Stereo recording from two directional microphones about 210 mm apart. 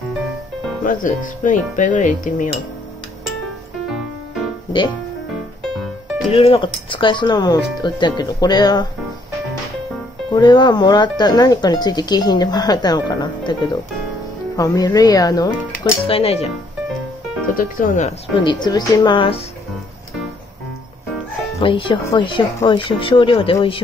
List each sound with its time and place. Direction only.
0.8 s music: 40° left (ahead or behind)
6.3 s speech: 25° left (ahead or behind)
10.3 s speech: 20° left (ahead or behind)
17.6 s music: 40° left (ahead or behind)
18.4 s speech: 20° left (ahead or behind)
21.5 s speech: 25° left (ahead or behind)